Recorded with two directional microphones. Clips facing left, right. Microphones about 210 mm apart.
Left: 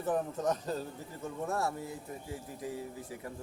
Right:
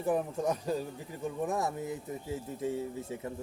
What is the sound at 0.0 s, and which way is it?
A man's voice, 10° right (ahead or behind).